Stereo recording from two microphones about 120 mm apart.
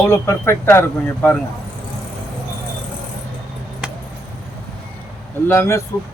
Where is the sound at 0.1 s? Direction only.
20° left (ahead or behind).